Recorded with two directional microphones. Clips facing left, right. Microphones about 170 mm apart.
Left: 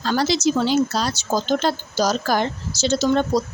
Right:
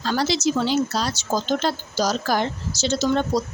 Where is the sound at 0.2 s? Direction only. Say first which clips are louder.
Left 2 dB; 45° left (ahead or behind).